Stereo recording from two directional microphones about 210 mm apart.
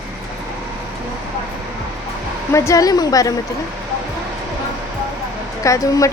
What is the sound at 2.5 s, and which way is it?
Speech, 15° left (ahead or behind).